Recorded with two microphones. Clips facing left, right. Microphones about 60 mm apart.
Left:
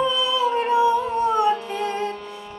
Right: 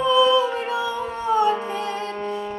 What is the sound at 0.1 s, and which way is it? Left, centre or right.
Singing, right.